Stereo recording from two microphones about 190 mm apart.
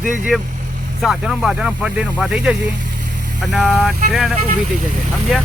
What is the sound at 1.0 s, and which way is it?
Speech, 5° right (ahead or behind).